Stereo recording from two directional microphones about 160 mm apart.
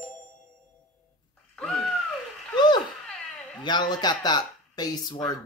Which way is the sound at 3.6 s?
25° left (ahead or behind).